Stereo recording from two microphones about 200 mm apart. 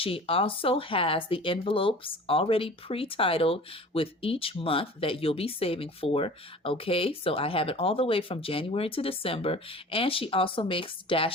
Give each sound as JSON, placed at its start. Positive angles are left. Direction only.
{"t": 0.0, "sound": "speech", "side_deg": 25}